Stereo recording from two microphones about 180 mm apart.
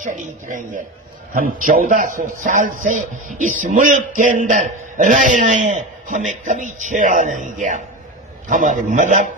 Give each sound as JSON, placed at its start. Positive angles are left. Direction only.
{"t": 0.0, "sound": "a man's voice", "side_deg": -45}